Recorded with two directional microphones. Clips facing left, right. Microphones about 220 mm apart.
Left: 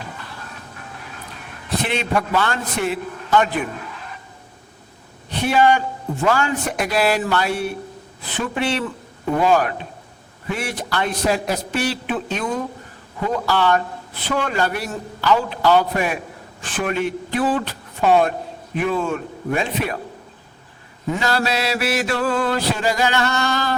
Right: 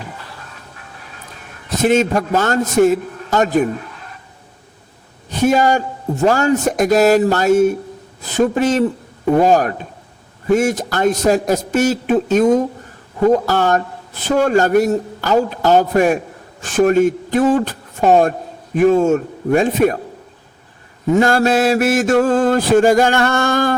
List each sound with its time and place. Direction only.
1.8 s mantra: 45° right (ahead or behind)
5.3 s mantra: 45° right (ahead or behind)
8.2 s a man's voice: 40° right (ahead or behind)
10.5 s mantra: 45° right (ahead or behind)
13.2 s a man's voice: 45° right (ahead or behind)
21.2 s mantra: 50° right (ahead or behind)